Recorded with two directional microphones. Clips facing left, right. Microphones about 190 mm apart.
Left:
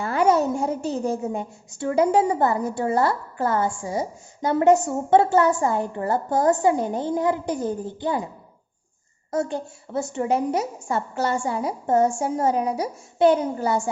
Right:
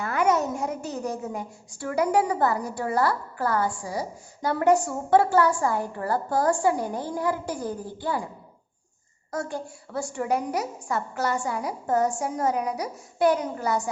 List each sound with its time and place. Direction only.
0.0 s a woman's voice: 30° left (ahead or behind)
9.3 s a woman's voice: 25° left (ahead or behind)